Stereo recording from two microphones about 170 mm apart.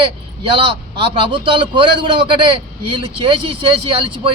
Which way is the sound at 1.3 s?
30° right (ahead or behind).